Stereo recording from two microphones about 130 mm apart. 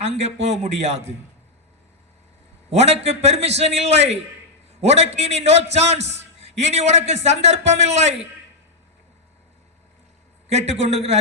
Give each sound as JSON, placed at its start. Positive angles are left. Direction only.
{"t": 0.0, "sound": "a man's voice", "side_deg": -55}
{"t": 2.6, "sound": "a man's voice", "side_deg": -55}
{"t": 10.5, "sound": "a man's voice", "side_deg": -55}